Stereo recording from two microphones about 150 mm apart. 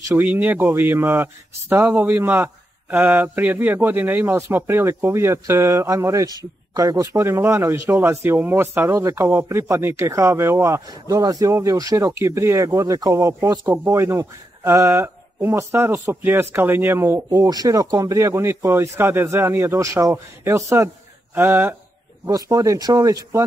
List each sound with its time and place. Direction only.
0.1 s a man's voice: 10° right (ahead or behind)